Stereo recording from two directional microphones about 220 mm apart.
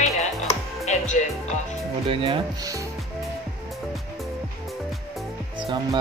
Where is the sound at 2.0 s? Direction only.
25° right (ahead or behind).